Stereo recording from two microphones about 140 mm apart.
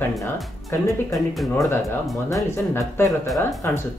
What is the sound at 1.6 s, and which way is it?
Speech, 20° left (ahead or behind).